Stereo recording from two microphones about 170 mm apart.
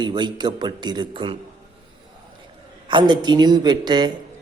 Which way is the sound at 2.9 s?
25° right (ahead or behind).